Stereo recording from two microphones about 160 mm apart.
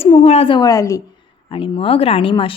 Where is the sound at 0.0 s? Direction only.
35° left (ahead or behind); by 1.0 s 20° left (ahead or behind).